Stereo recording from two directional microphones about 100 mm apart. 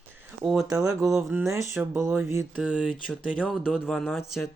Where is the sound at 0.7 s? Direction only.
35° right (ahead or behind).